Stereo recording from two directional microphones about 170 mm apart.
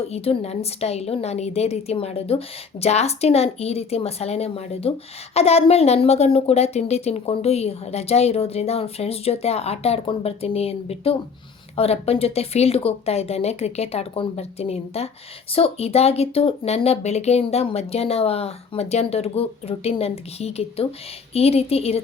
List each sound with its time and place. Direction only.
0.1 s speech: 40° left (ahead or behind)